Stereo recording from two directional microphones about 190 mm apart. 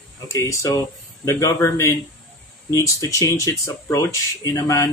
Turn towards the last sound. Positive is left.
turn(degrees=15)  # may be behind; listen again after turning